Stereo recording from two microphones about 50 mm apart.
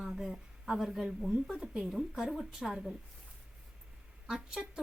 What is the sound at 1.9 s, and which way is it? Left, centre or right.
A woman's voice, centre.